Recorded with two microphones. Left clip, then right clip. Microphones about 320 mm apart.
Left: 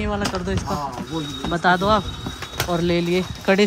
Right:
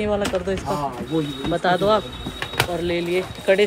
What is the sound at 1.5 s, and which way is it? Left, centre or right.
Speech, centre.